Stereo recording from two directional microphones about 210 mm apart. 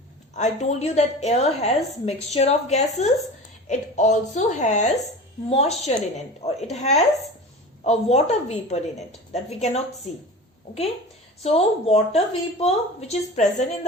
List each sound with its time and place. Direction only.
0.3 s a woman's voice: 35° left (ahead or behind)
11.4 s a woman's voice: 30° left (ahead or behind)